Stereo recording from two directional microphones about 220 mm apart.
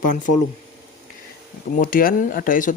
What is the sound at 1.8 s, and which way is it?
Speech, 40° left (ahead or behind).